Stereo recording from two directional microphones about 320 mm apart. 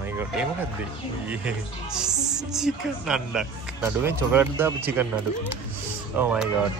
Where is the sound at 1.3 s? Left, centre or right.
Centre.